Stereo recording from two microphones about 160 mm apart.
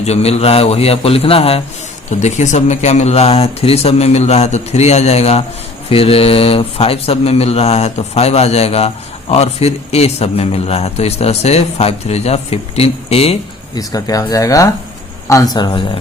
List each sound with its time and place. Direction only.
0.0 s a man's voice: 40° left (ahead or behind)
13.7 s speech: 20° left (ahead or behind)